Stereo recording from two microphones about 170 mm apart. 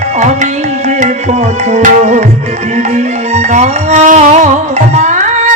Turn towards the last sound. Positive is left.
turn(degrees=-45)  # may be behind; listen again after turning